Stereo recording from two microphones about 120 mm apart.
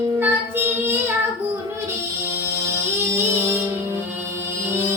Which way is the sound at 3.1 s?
20° right (ahead or behind).